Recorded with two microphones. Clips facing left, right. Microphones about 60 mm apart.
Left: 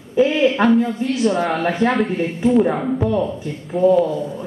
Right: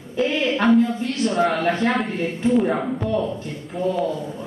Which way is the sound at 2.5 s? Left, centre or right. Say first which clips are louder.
Left 4 dB; centre.